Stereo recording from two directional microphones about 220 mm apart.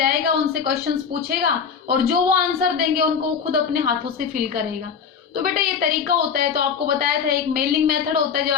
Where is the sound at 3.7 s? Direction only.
40° right (ahead or behind).